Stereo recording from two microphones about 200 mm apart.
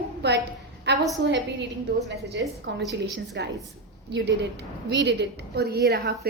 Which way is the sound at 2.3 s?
60° right (ahead or behind).